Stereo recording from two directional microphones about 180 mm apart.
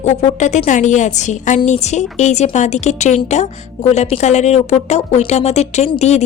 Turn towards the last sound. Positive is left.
turn(degrees=40)  # may be behind; listen again after turning